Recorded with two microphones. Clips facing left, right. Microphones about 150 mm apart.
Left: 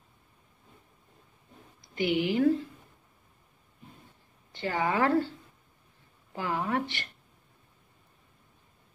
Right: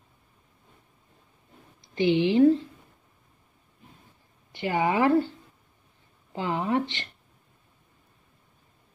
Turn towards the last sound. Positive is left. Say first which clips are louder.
# right 4 dB
turn(degrees=-20)  # may be behind; listen again after turning